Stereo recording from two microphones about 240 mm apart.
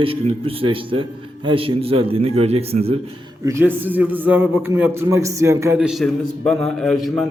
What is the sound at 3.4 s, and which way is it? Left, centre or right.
A man's voice, centre.